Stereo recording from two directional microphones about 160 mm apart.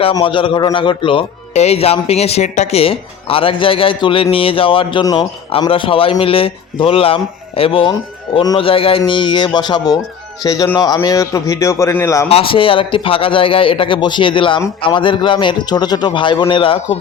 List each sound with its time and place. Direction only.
0.0 s a man's voice: 30° left (ahead or behind)
12.3 s speech: 35° left (ahead or behind)